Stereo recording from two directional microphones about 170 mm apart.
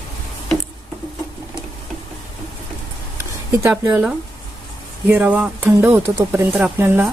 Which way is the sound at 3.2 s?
15° right (ahead or behind).